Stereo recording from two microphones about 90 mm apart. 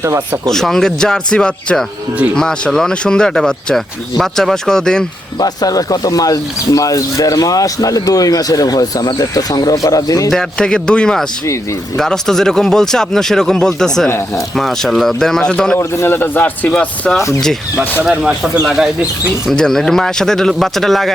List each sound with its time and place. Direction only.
0.4 s speech: 5° left (ahead or behind)
5.4 s speech: 40° left (ahead or behind)
10.3 s speech: 10° left (ahead or behind)
15.8 s a man's voice: 25° left (ahead or behind)
18.0 s speech: 10° right (ahead or behind)